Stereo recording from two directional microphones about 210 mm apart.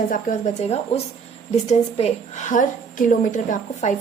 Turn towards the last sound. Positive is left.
turn(degrees=35)  # may be behind; listen again after turning